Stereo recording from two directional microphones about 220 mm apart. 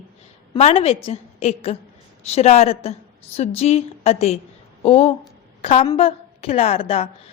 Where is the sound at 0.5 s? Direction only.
30° left (ahead or behind).